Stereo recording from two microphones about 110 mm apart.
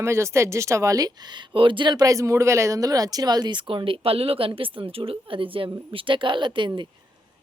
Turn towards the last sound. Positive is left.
turn(degrees=-45)  # may be behind; listen again after turning